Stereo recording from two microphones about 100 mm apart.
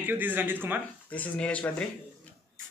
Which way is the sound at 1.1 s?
10° left (ahead or behind).